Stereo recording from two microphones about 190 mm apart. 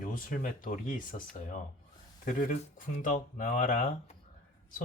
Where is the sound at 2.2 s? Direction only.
45° left (ahead or behind).